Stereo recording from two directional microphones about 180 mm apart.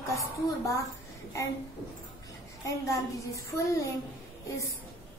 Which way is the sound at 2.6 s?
15° left (ahead or behind).